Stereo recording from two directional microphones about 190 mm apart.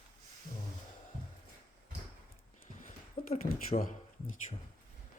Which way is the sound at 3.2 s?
50° left (ahead or behind).